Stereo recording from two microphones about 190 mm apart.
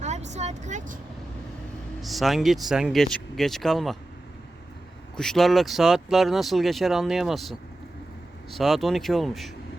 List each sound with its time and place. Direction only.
0.0 s vehicle: 35° right (ahead or behind)
2.0 s speech: centre (ahead or behind)
5.1 s speech: 5° left (ahead or behind)
8.5 s speech: centre (ahead or behind)